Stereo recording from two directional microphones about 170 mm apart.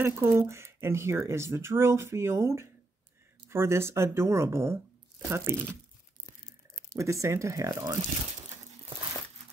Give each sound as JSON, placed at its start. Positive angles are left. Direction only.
{"t": 0.0, "sound": "speech", "side_deg": -15}
{"t": 6.9, "sound": "speech", "side_deg": -15}